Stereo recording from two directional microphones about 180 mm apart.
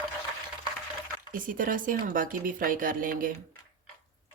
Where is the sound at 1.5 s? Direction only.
50° right (ahead or behind).